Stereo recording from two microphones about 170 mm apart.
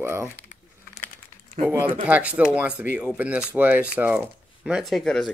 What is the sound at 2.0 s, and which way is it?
Speech, 10° right (ahead or behind).